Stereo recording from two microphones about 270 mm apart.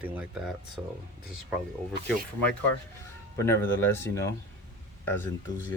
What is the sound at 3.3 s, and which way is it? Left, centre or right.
Speech, centre.